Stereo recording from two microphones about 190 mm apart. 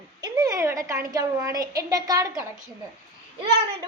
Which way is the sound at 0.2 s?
20° right (ahead or behind).